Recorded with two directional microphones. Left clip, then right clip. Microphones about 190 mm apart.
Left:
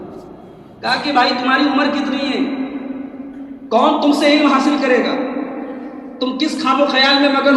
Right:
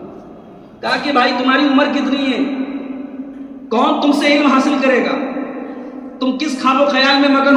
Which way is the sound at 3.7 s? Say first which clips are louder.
Left 1 dB; 45° right (ahead or behind).